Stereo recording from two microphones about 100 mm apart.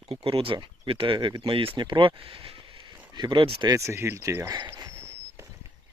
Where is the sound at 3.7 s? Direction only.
30° right (ahead or behind).